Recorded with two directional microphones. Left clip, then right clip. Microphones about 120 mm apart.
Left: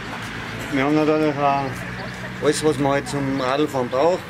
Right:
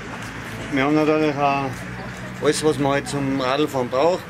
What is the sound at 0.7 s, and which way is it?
Speech, centre (ahead or behind).